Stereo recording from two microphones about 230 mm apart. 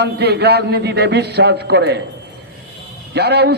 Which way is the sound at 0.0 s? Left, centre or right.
Right.